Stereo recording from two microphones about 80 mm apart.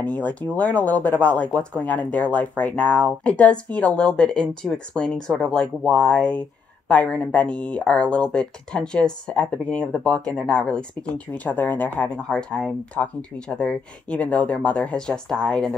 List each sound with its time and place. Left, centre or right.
0.0 s speech: centre
12.1 s speech: centre